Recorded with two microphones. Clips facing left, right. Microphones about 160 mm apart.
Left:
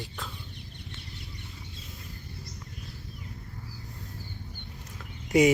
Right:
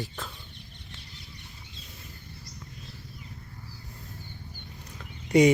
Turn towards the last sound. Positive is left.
turn(degrees=5)  # may be behind; listen again after turning